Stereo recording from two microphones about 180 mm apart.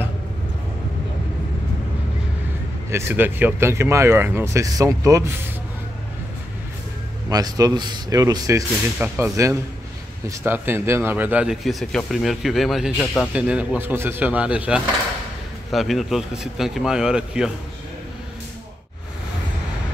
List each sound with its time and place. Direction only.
2.9 s speech: 15° right (ahead or behind)
7.2 s speech: 20° right (ahead or behind); by 17.5 s 5° right (ahead or behind)